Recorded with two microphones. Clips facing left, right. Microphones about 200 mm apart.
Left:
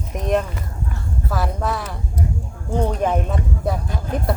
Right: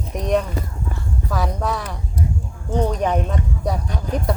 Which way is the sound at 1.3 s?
5° left (ahead or behind).